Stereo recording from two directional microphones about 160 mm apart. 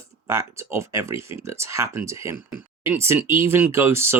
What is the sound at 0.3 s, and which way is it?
Speech, 15° right (ahead or behind).